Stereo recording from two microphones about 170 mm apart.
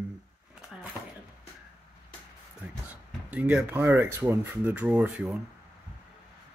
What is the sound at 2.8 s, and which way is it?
Speech, 10° right (ahead or behind).